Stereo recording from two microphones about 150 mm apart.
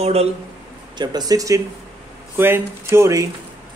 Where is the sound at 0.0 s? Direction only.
45° right (ahead or behind).